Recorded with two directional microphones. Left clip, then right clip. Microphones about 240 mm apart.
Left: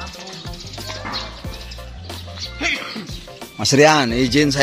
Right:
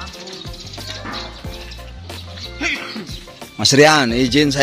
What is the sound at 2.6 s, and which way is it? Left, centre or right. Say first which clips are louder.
Music: even; centre.